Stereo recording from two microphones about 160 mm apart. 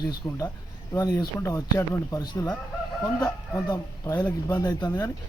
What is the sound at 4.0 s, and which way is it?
Speech, 20° left (ahead or behind).